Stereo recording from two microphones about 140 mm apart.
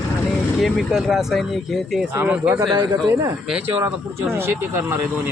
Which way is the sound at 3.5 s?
15° right (ahead or behind).